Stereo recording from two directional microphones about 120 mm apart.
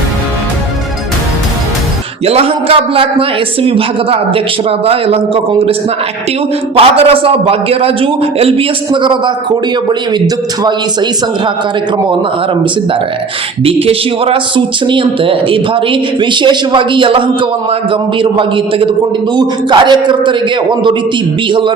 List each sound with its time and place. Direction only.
2.2 s a man's voice: 55° right (ahead or behind)
6.7 s a man's voice: 50° right (ahead or behind)
8.9 s a man's voice: 40° right (ahead or behind)
13.8 s a man's voice: 50° right (ahead or behind)